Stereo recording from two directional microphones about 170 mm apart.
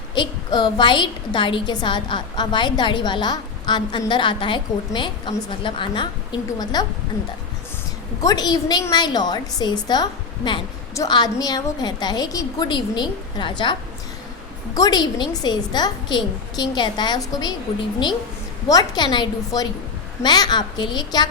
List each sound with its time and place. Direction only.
0.1 s a woman's voice: 25° left (ahead or behind)
8.2 s a woman's voice: 20° left (ahead or behind)
14.8 s a woman's voice: 25° left (ahead or behind)
18.7 s a woman's voice: 25° left (ahead or behind)